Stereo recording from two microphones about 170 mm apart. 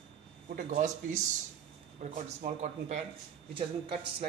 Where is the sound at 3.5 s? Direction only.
30° right (ahead or behind).